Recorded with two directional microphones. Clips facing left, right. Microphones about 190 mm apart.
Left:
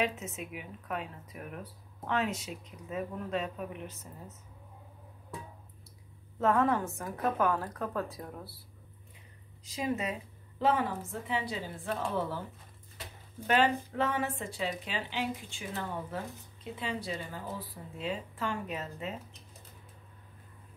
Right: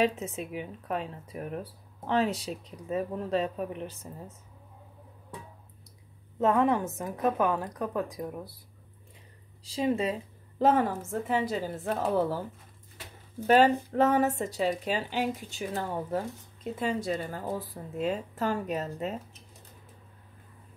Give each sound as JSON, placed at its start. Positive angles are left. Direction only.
{"t": 0.0, "sound": "speech", "side_deg": -30}
{"t": 6.4, "sound": "a woman's voice", "side_deg": -15}
{"t": 9.7, "sound": "speech", "side_deg": -30}
{"t": 10.6, "sound": "speech", "side_deg": -40}
{"t": 13.5, "sound": "speech", "side_deg": -40}